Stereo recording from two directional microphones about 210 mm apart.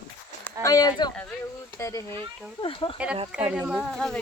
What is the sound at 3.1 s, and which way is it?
Speech, 30° right (ahead or behind).